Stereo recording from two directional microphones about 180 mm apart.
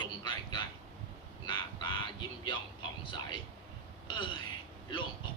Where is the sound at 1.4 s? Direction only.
25° left (ahead or behind).